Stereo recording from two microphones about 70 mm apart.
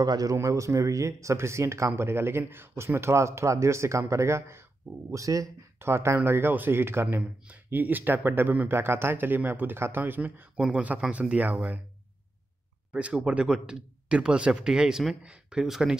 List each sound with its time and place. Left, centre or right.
0.0 s a man's voice: right
5.1 s a man's voice: right
5.8 s speech: right
12.9 s speech: centre